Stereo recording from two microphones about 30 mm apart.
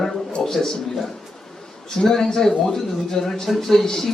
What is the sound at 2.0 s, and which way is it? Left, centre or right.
Speech, centre.